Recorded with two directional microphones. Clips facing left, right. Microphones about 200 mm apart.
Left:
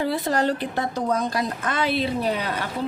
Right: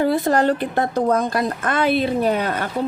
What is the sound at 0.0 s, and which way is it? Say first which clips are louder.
A woman's voice: right 5 dB; 50° right (ahead or behind).